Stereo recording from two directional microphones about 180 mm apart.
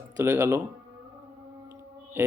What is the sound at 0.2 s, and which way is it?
Speech, 15° right (ahead or behind).